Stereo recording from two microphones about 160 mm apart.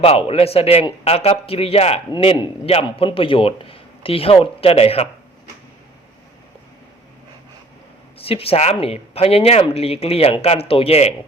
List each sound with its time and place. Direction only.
0.0 s a man's voice: 40° left (ahead or behind)
8.2 s a man's voice: 35° left (ahead or behind)